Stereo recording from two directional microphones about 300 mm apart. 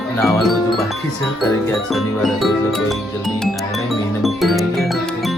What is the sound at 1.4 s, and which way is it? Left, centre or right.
Speech, centre.